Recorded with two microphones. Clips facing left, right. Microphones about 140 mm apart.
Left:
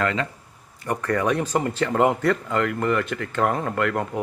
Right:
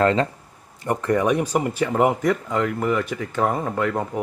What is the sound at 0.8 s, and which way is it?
Speech, 20° right (ahead or behind).